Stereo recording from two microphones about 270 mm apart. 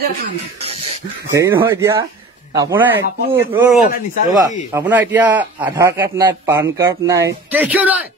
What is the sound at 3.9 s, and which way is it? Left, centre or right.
Speech, left.